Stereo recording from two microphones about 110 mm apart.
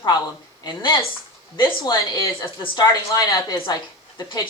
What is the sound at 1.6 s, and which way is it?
Speech, 30° left (ahead or behind).